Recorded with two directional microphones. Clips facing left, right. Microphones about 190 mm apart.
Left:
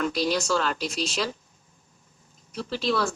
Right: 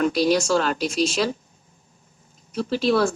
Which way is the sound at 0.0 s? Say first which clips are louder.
Right 6 dB; 15° right (ahead or behind).